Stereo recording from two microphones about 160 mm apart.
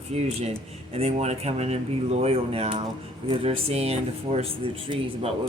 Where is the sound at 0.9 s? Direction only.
40° right (ahead or behind).